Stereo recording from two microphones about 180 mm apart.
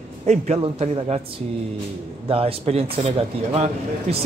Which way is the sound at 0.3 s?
35° right (ahead or behind).